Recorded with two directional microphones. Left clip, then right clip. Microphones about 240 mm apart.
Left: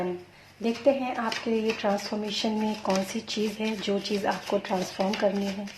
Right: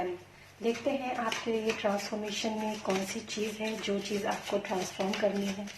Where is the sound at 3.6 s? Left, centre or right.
Left.